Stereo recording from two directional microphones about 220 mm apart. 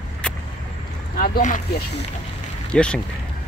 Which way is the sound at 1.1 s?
40° left (ahead or behind).